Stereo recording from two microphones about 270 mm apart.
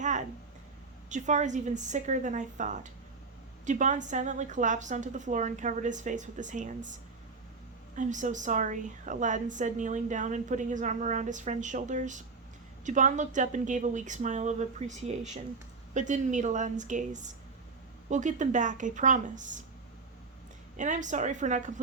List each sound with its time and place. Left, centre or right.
0.0 s a sound: right
1.1 s a woman's voice: right
7.9 s a woman's voice: right
20.7 s a woman's voice: right